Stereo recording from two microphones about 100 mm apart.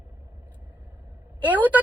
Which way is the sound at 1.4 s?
15° right (ahead or behind).